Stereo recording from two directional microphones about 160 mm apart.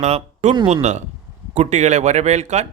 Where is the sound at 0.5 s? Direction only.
30° right (ahead or behind).